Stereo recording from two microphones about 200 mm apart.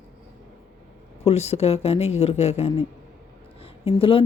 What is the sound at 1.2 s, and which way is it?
A woman's voice, 30° left (ahead or behind).